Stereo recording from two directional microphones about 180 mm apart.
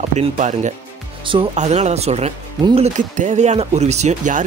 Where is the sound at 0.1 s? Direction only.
40° right (ahead or behind).